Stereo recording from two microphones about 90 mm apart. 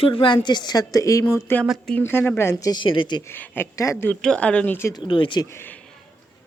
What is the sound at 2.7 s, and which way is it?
Speech, 70° left (ahead or behind).